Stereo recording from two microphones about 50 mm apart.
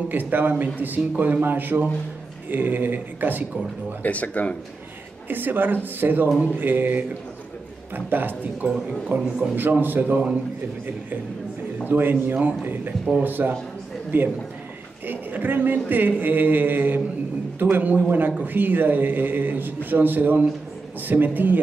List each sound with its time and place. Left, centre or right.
0.1 s a man's voice: right
4.0 s speech: left
5.3 s a man's voice: right
11.9 s a man's voice: right